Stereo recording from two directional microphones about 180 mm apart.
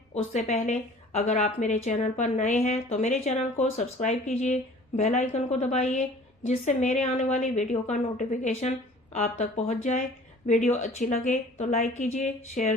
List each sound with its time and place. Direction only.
0.3 s a woman's voice: 40° left (ahead or behind)